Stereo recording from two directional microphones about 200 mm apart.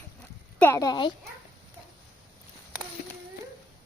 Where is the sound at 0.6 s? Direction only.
15° left (ahead or behind).